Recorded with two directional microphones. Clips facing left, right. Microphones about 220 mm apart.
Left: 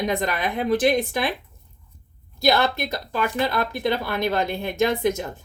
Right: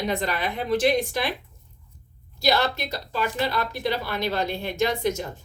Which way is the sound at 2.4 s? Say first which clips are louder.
Left 3 dB; 55° left (ahead or behind).